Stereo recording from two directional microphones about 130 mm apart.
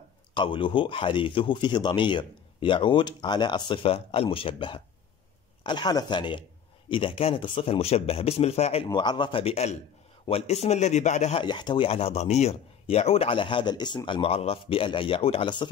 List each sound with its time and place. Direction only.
0.3 s a man's voice: 40° left (ahead or behind)
8.8 s speech: 35° left (ahead or behind)
9.4 s a man's voice: 55° left (ahead or behind)
11.3 s a man's voice: 35° left (ahead or behind)